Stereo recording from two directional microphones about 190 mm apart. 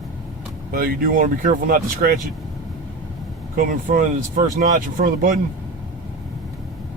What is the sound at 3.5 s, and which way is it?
Speech, 50° right (ahead or behind).